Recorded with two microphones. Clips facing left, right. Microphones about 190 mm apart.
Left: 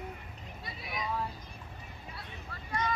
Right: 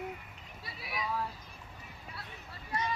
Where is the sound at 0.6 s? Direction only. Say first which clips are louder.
Even; 5° right (ahead or behind).